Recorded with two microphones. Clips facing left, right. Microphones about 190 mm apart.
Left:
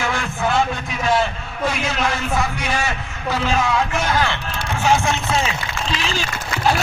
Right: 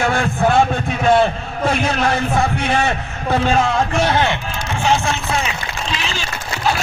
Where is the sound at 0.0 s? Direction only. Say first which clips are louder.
Right 6 dB; 55° right (ahead or behind).